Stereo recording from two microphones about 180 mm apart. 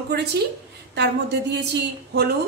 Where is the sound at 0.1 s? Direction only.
65° right (ahead or behind).